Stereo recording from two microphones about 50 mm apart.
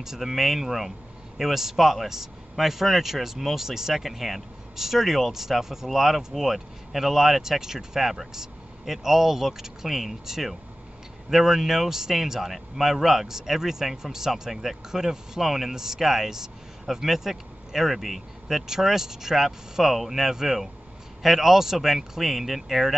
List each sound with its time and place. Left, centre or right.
0.0 s speech: centre